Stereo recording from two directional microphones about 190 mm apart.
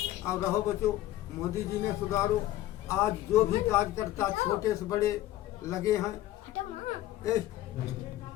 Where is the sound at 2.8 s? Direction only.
15° left (ahead or behind).